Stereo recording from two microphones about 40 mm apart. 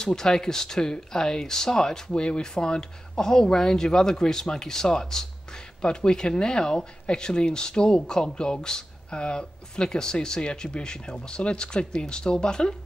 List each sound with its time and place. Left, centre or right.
0.0 s speech: centre
2.1 s speech: left